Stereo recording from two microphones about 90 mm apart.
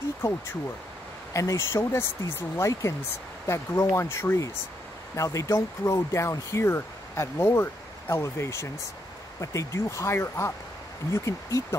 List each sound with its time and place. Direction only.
1.3 s speech: 35° left (ahead or behind)